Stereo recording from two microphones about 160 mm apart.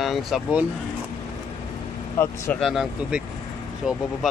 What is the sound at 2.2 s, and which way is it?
Speech, 15° left (ahead or behind).